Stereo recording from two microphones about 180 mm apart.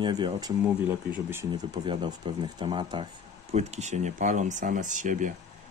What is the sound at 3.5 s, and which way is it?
Speech, 40° right (ahead or behind).